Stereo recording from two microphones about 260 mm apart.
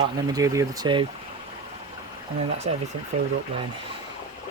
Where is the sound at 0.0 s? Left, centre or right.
Centre.